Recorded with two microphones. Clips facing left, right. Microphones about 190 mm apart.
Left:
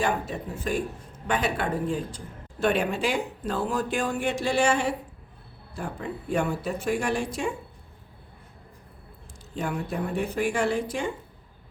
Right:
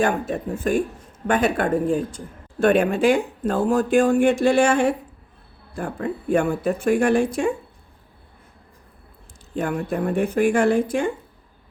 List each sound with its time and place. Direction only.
0.0 s speech: 50° right (ahead or behind)
9.6 s speech: 50° right (ahead or behind)